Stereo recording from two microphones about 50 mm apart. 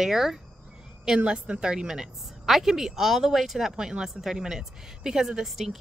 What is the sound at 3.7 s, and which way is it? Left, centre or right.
A woman's voice, centre.